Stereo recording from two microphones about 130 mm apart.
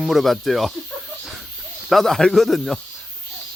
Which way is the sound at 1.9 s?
Centre (ahead or behind).